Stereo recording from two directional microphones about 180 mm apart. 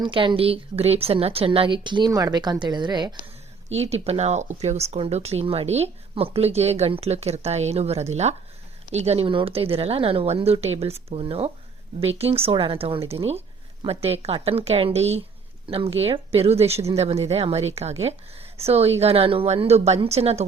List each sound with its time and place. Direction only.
0.0 s speech: 30° right (ahead or behind)
3.8 s speech: 35° right (ahead or behind)